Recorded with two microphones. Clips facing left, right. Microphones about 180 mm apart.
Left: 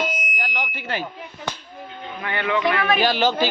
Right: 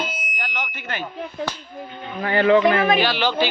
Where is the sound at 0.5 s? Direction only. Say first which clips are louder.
Left 2 dB; 35° left (ahead or behind).